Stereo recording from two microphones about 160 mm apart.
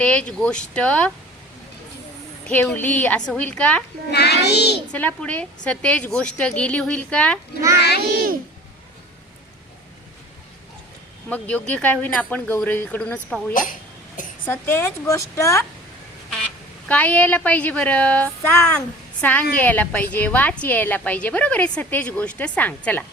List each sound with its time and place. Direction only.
0.0 s a woman's voice: 5° left (ahead or behind)
2.7 s a woman's voice: 10° left (ahead or behind)
4.1 s child singing: 90° left
4.9 s a woman's voice: 10° left (ahead or behind)
7.8 s a sound: 90° left
8.1 s babbling: 65° right (ahead or behind)
11.3 s a woman's voice: 10° left (ahead or behind)
13.5 s a woman's voice: 55° left (ahead or behind)
14.4 s a woman's voice: 15° left (ahead or behind)
16.9 s a woman's voice: 10° left (ahead or behind)